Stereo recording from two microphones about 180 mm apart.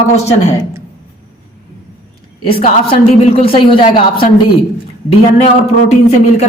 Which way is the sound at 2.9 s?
30° left (ahead or behind).